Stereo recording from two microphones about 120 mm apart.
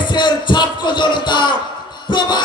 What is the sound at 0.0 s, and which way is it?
Music, 40° left (ahead or behind).